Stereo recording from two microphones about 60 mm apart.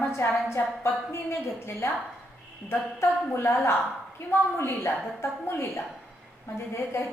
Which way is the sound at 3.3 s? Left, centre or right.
Left.